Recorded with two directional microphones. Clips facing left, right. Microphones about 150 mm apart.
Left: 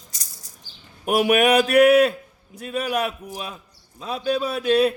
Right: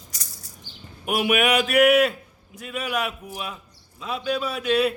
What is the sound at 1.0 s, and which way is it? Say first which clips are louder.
A man's voice: left 4 dB; 40° left (ahead or behind).